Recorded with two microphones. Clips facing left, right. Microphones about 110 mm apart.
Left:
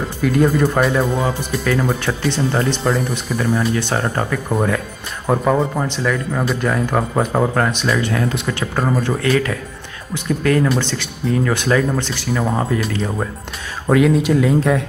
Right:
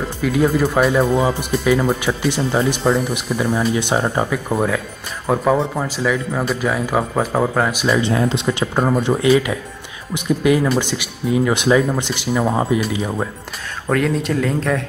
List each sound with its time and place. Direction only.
0.2 s speech: centre (ahead or behind)
3.2 s speech: 15° right (ahead or behind)
8.0 s speech: 25° right (ahead or behind)
13.8 s speech: 5° left (ahead or behind)